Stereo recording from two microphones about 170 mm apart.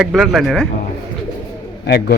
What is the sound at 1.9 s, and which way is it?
Speech, 70° left (ahead or behind).